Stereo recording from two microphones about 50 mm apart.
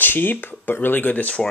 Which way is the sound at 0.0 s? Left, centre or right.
Left.